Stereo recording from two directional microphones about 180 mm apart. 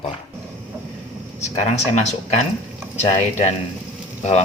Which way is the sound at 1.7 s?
40° left (ahead or behind).